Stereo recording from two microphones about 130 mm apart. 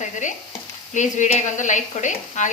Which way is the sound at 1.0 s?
70° left (ahead or behind).